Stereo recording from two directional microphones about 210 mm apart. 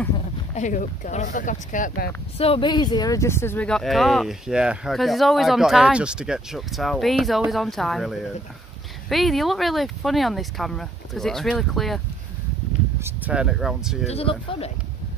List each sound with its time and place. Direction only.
0.6 s speech: 35° left (ahead or behind); by 12.0 s centre (ahead or behind)
13.0 s speech: 5° right (ahead or behind)
14.0 s speech: 30° left (ahead or behind)